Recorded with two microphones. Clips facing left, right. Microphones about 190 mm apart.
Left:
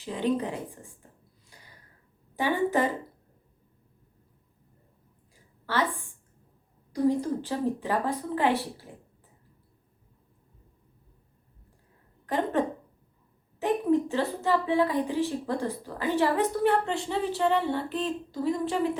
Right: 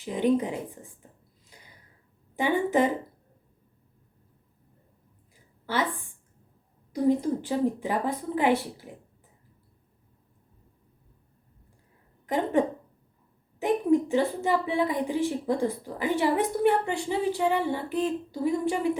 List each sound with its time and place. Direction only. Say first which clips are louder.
0.0 s a woman's voice: right 3 dB; 15° right (ahead or behind)
2.4 s a woman's voice: right 2 dB; 20° right (ahead or behind)
6.9 s a woman's voice: right 1 dB; 20° right (ahead or behind)
12.2 s a woman's voice: right 2 dB; 15° right (ahead or behind)